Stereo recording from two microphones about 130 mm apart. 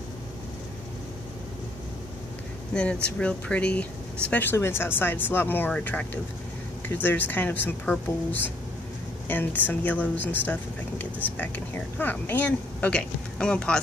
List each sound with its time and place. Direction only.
2.7 s a woman's voice: 5° left (ahead or behind)